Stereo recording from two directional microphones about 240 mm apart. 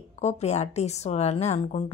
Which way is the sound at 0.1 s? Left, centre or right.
Left.